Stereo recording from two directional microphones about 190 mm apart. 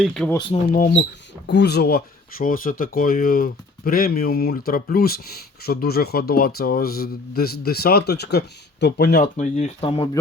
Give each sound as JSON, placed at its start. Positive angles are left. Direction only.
{"t": 0.0, "sound": "speech", "side_deg": 5}
{"t": 0.7, "sound": "speech", "side_deg": 50}